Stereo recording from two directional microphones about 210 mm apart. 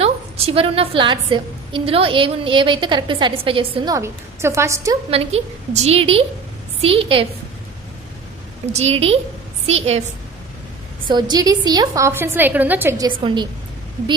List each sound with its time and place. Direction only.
0.0 s a woman's voice: 30° right (ahead or behind)
5.1 s a woman's voice: 30° right (ahead or behind)
8.7 s a woman's voice: 30° right (ahead or behind)
11.1 s a woman's voice: 20° right (ahead or behind)
13.1 s a woman's voice: 25° right (ahead or behind)